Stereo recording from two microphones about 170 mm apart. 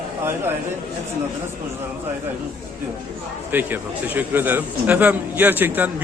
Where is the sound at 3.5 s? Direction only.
10° right (ahead or behind).